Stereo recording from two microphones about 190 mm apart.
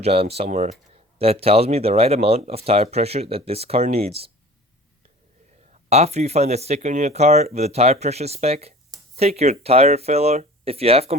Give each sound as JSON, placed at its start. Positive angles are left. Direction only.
{"t": 0.0, "sound": "speech", "side_deg": -30}
{"t": 5.7, "sound": "speech", "side_deg": -35}